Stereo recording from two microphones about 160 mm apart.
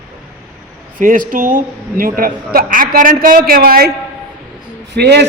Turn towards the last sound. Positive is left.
turn(degrees=-90)